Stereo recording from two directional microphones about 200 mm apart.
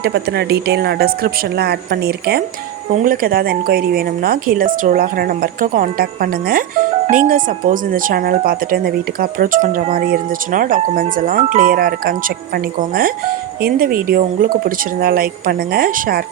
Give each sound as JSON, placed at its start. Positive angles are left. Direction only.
{"t": 0.0, "sound": "speech", "side_deg": -55}